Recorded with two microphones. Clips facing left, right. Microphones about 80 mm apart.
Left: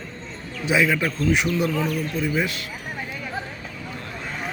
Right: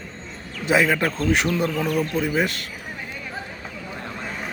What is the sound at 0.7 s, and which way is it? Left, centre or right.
Speech, right.